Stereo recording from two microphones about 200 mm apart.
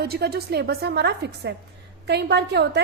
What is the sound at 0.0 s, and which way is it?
A woman's voice, 55° right (ahead or behind).